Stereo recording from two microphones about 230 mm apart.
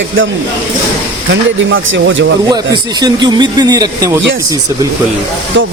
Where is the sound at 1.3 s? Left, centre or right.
Right.